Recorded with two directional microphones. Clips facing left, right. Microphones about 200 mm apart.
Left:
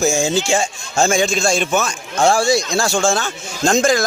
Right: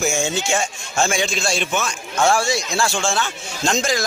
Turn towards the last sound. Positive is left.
turn(degrees=50)  # may be behind; listen again after turning